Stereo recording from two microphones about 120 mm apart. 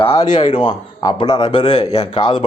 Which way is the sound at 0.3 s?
40° left (ahead or behind).